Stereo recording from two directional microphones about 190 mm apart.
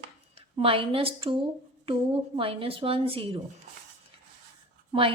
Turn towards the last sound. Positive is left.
turn(degrees=-30)  # may be behind; listen again after turning